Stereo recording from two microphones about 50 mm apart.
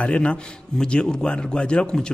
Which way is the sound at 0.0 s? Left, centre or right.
Left.